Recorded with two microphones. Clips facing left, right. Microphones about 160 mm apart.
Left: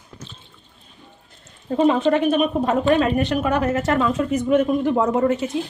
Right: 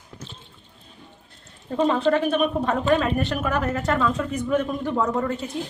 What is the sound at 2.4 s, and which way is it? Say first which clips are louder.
Speech: left 3 dB; 20° left (ahead or behind).